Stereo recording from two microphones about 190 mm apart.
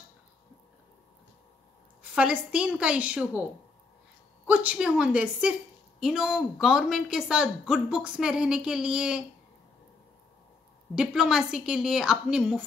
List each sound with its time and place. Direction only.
2.1 s a woman's voice: 5° right (ahead or behind)
4.5 s a woman's voice: 10° right (ahead or behind)
11.0 s a woman's voice: 5° right (ahead or behind)